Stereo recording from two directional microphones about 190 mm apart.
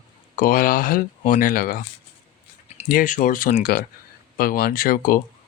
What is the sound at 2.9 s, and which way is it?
Speech, 45° left (ahead or behind).